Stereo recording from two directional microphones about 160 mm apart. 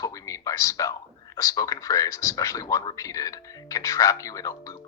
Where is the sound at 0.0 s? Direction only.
20° left (ahead or behind).